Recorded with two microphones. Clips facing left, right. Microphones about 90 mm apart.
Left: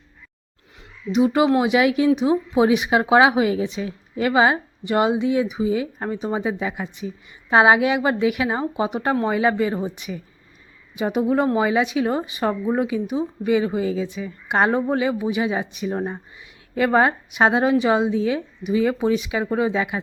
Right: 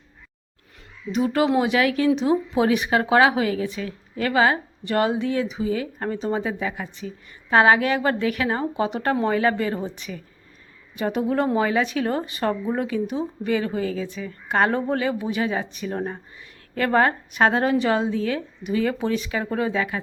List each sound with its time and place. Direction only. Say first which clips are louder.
1.1 s speech: left 3 dB; 15° left (ahead or behind)